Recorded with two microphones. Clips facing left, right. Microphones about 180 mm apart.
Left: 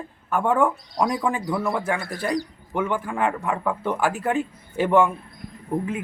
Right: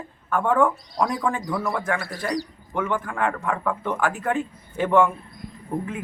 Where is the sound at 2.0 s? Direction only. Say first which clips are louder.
Left 2 dB; 20° left (ahead or behind).